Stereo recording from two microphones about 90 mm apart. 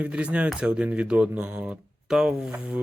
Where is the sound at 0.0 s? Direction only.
15° right (ahead or behind).